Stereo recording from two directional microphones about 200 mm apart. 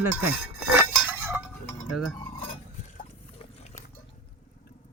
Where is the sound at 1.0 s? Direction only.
10° right (ahead or behind).